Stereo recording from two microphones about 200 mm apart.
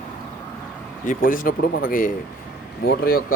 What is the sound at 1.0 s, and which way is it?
Speech, 40° left (ahead or behind).